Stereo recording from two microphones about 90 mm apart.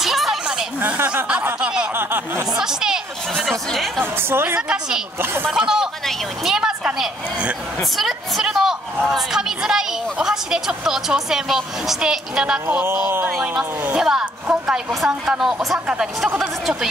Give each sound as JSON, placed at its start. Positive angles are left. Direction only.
{"t": 0.0, "sound": "a sound", "side_deg": 0}
{"t": 0.7, "sound": "a woman's voice", "side_deg": -20}
{"t": 1.6, "sound": "a sound", "side_deg": -10}
{"t": 2.0, "sound": "a sound", "side_deg": -25}
{"t": 2.5, "sound": "a woman's voice", "side_deg": -5}
{"t": 4.0, "sound": "a woman's voice", "side_deg": -25}
{"t": 4.6, "sound": "a woman's voice", "side_deg": -5}
{"t": 5.2, "sound": "a woman's voice", "side_deg": -25}
{"t": 5.5, "sound": "a woman's voice", "side_deg": -5}
{"t": 12.8, "sound": "a woman's voice", "side_deg": -25}
{"t": 13.9, "sound": "a woman's voice", "side_deg": -10}